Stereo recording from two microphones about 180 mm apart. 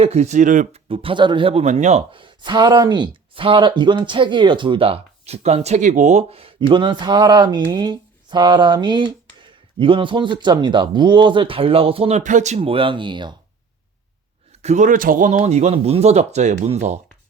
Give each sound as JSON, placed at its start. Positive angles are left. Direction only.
{"t": 0.0, "sound": "speech", "side_deg": -35}
{"t": 0.9, "sound": "speech", "side_deg": -30}
{"t": 14.6, "sound": "speech", "side_deg": -40}